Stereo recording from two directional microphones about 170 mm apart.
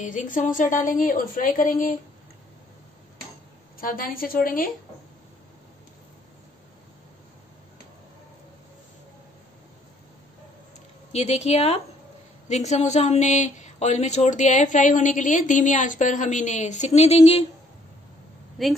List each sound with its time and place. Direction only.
0.0 s speech: 50° left (ahead or behind)
3.8 s a woman's voice: 55° left (ahead or behind)
11.1 s speech: 40° left (ahead or behind)
18.6 s a woman's voice: centre (ahead or behind)